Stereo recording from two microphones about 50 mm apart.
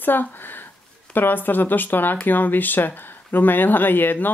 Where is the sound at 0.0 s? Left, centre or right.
Left.